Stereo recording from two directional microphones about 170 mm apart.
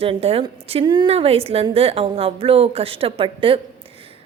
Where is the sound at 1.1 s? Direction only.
35° right (ahead or behind).